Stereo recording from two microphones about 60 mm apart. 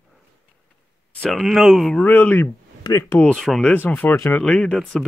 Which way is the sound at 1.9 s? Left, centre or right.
Left.